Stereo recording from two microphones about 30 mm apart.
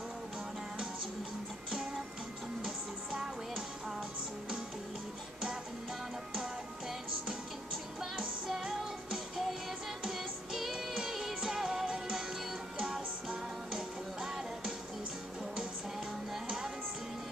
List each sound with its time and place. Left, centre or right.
2.6 s music: right
6.9 s music: centre
16.4 s music: right